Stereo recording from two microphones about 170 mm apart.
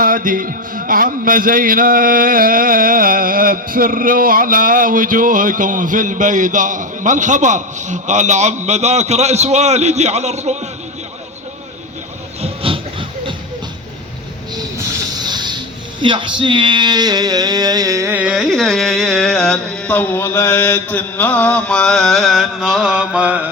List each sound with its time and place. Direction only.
0.0 s a man's voice: 55° right (ahead or behind)
12.4 s a sound: 30° right (ahead or behind)
15.2 s music: 25° right (ahead or behind)
16.0 s speech: 30° right (ahead or behind)
18.1 s carnatic music: 5° right (ahead or behind)